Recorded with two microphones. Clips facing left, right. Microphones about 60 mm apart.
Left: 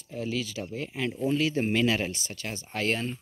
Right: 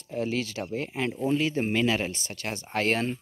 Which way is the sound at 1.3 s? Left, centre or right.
Centre.